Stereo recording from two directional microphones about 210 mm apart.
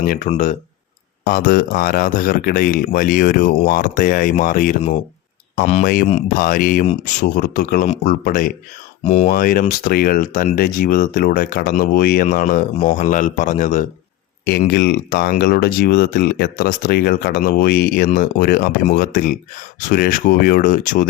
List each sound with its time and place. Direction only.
0.0 s speech: 40° left (ahead or behind)
14.7 s speech: 50° left (ahead or behind)